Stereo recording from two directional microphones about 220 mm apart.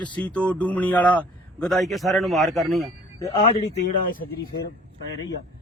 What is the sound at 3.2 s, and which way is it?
Speech, 15° left (ahead or behind).